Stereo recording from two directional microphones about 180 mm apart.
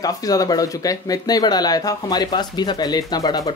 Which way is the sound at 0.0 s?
20° left (ahead or behind).